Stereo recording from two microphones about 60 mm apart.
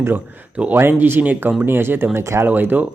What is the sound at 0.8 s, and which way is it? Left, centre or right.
Speech, right.